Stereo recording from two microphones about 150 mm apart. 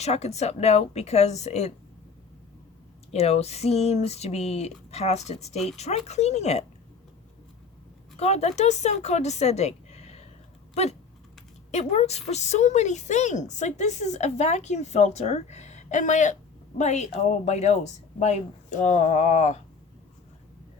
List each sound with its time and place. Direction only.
0.0 s speech: 45° left (ahead or behind)
3.1 s speech: 45° left (ahead or behind)
8.1 s speech: 45° left (ahead or behind)